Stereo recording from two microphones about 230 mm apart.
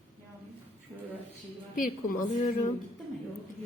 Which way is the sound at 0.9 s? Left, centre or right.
Centre.